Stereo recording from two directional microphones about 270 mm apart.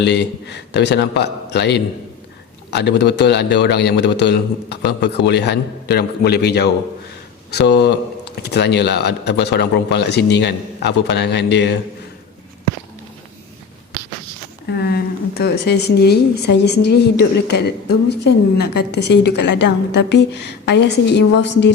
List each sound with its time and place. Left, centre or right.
0.0 s speech: left
14.7 s speech: left